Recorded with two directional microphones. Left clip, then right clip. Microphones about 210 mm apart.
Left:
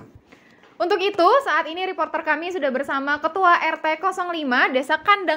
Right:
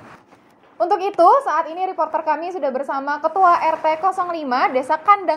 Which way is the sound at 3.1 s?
60° left (ahead or behind).